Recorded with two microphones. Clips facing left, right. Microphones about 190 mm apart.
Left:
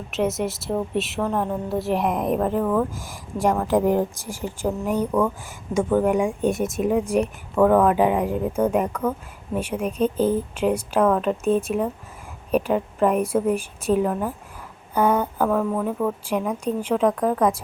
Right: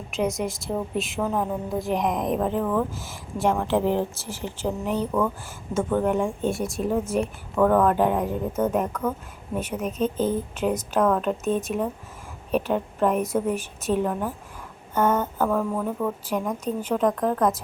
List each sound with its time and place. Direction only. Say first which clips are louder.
0.1 s a woman's voice: left 2 dB; 5° left (ahead or behind)
10.2 s a woman's voice: left 4 dB; 35° left (ahead or behind)
10.6 s a woman's voice: left 2 dB; 10° left (ahead or behind)
15.4 s a woman's voice: left 2 dB; centre (ahead or behind)